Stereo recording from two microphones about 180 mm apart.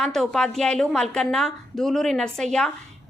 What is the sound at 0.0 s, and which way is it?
A woman's voice, centre (ahead or behind).